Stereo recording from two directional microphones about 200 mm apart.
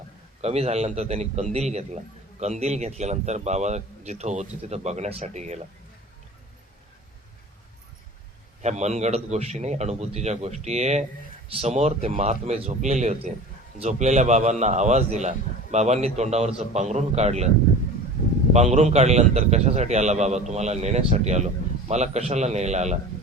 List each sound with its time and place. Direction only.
0.4 s a man's voice: 30° right (ahead or behind)
8.6 s a man's voice: 35° right (ahead or behind)
18.5 s a man's voice: 35° right (ahead or behind)